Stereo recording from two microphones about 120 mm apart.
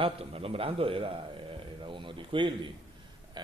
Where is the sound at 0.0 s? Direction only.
55° right (ahead or behind).